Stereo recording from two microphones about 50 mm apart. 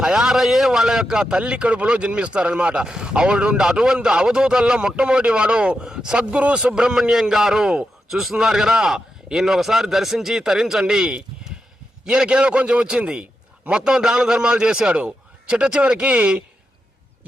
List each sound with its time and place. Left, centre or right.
0.0 s a man's voice: centre; by 16.4 s right